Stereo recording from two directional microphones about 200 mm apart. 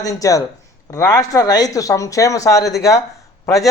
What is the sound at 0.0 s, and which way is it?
A man's voice, 15° left (ahead or behind).